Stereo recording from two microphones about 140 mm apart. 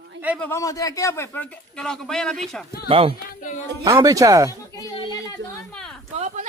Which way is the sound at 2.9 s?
40° right (ahead or behind).